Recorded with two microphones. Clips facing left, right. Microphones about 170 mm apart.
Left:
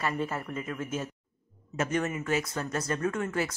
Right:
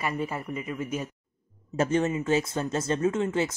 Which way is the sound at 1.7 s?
30° right (ahead or behind).